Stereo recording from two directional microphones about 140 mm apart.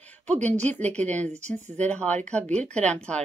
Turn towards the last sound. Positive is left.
turn(degrees=5)  # may be behind; listen again after turning